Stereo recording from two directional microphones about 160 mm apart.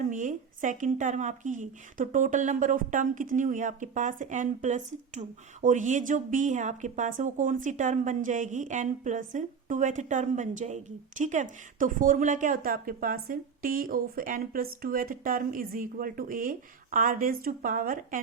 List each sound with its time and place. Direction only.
0.1 s a woman's voice: 50° right (ahead or behind)